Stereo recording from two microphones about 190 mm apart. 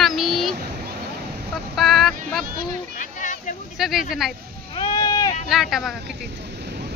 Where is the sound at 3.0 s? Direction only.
40° left (ahead or behind).